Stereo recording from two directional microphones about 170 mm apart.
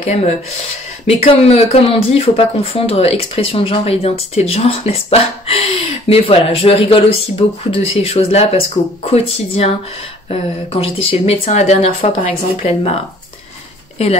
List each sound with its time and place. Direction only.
0.0 s speech: 40° left (ahead or behind)